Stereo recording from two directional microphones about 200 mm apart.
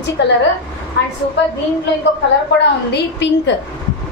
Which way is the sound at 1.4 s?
60° left (ahead or behind).